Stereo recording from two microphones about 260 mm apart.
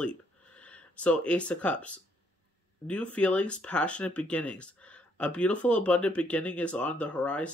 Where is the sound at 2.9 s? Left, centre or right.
Centre.